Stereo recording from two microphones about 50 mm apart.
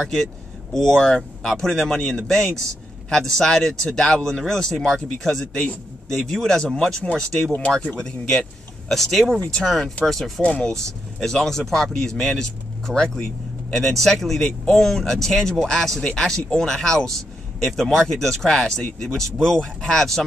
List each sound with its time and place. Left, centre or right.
0.0 s speech: centre
8.3 s speech: centre
10.4 s speech: left
10.7 s speech: centre